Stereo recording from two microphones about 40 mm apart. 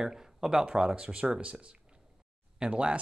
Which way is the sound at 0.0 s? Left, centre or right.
Centre.